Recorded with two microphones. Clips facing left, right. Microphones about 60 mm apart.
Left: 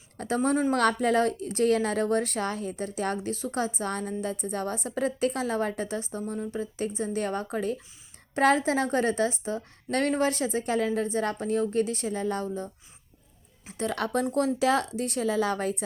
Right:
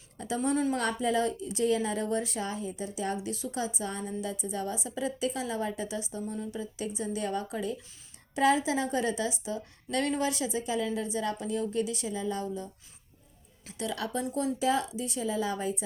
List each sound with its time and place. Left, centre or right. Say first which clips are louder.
0.2 s a woman's voice: left 4 dB; left
0.7 s a woman's voice: left 5 dB; left
13.7 s a woman's voice: left 5 dB; left
14.3 s a woman's voice: left 3 dB; left